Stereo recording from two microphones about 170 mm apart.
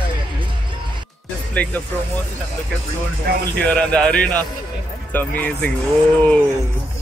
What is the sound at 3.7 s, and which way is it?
Speech, 5° left (ahead or behind).